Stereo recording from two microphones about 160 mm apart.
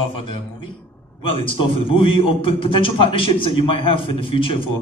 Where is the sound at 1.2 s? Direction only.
35° left (ahead or behind).